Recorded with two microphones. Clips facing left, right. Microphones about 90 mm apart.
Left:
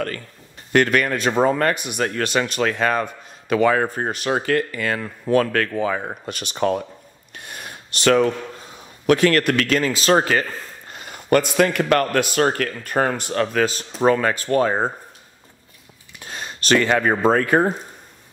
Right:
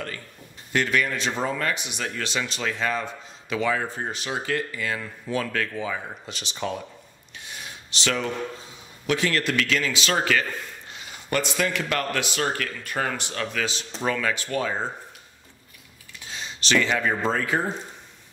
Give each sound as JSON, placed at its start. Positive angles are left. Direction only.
{"t": 0.7, "sound": "a man's voice", "side_deg": 55}
{"t": 16.2, "sound": "speech", "side_deg": 50}